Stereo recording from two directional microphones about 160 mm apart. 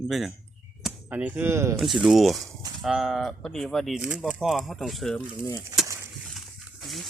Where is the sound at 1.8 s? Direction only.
5° right (ahead or behind).